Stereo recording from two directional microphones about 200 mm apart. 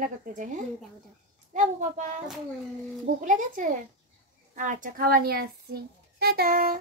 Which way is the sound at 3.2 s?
40° right (ahead or behind).